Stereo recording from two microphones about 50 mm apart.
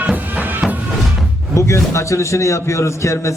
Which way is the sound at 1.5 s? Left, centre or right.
Left.